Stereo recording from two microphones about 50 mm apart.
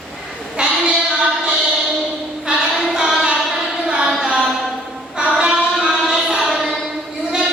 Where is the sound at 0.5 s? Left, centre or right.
Centre.